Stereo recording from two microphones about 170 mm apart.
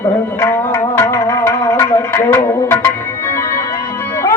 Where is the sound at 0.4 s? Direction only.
15° left (ahead or behind).